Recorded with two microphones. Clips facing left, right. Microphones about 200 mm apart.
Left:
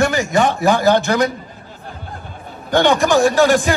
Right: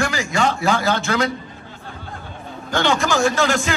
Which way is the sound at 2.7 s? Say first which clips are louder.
Left 6 dB; 15° left (ahead or behind).